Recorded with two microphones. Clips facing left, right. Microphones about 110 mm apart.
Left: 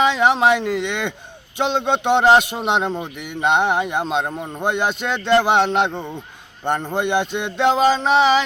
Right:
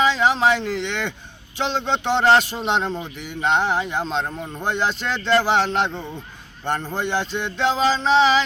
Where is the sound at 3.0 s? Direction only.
60° left (ahead or behind).